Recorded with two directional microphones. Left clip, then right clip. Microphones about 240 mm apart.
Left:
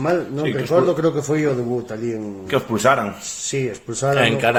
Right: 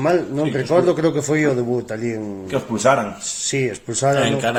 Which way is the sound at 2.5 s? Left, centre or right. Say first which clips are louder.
Even; left.